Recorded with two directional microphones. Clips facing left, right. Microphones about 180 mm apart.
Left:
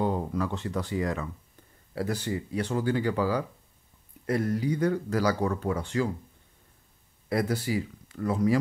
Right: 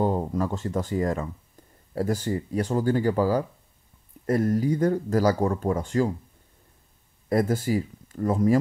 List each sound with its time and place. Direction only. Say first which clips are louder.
0.0 s speech: right 3 dB; 40° right (ahead or behind)
7.2 s speech: right 4 dB; 45° right (ahead or behind)